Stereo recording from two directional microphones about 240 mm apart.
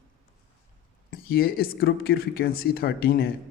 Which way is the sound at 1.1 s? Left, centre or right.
Left.